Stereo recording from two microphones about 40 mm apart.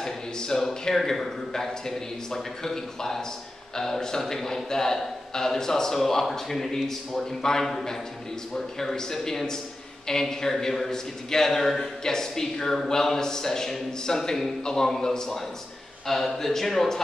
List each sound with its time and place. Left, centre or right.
0.0 s a man's voice: centre